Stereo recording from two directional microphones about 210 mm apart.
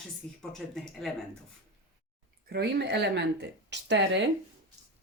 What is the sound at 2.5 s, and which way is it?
Speech, 50° right (ahead or behind).